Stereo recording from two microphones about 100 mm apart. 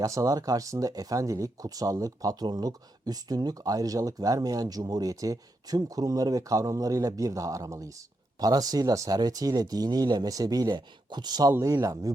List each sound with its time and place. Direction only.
0.0 s speech: 35° right (ahead or behind)